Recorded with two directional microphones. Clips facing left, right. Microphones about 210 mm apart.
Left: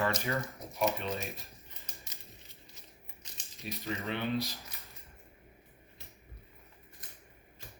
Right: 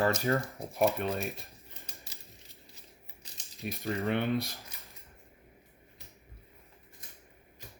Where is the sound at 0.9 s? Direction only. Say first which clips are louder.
Right 4 dB; 55° right (ahead or behind).